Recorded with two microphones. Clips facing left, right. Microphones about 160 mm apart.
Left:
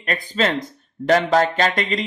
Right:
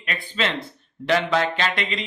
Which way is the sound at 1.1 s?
40° left (ahead or behind).